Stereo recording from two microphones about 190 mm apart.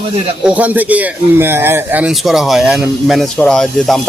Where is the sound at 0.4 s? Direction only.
5° right (ahead or behind).